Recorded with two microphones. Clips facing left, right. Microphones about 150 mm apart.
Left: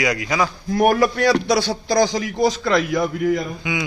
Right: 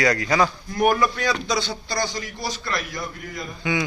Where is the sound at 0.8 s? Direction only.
65° left (ahead or behind); by 3.4 s 90° left.